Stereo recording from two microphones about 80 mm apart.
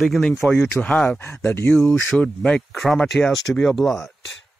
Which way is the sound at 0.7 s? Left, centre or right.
Centre.